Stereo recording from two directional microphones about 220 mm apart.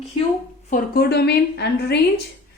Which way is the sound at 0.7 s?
40° left (ahead or behind).